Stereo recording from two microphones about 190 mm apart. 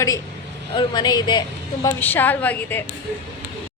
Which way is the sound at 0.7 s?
25° left (ahead or behind).